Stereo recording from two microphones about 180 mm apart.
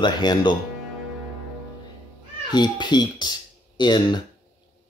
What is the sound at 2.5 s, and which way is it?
Speech, 25° left (ahead or behind).